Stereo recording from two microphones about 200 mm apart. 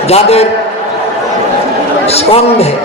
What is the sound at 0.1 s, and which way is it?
Speech, 30° left (ahead or behind).